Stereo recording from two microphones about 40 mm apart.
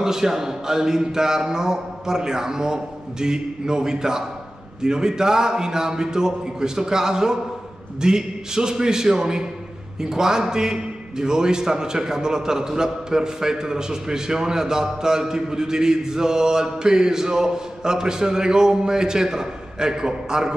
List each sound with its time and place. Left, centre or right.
0.0 s a man's voice: centre